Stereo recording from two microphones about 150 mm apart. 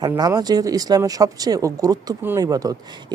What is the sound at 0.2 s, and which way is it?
Speech, 25° right (ahead or behind).